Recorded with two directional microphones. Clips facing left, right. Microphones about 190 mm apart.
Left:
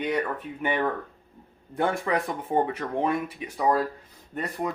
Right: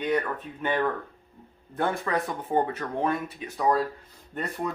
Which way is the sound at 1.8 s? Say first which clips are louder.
Left 2 dB; 15° left (ahead or behind).